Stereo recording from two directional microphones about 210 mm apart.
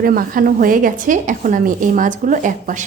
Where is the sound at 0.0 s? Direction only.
45° right (ahead or behind).